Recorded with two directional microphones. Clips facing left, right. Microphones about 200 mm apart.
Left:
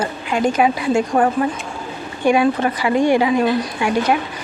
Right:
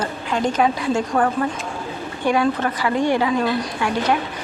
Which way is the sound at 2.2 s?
15° left (ahead or behind).